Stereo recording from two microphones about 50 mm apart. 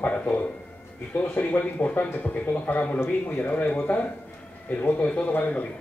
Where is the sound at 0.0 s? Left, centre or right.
Left.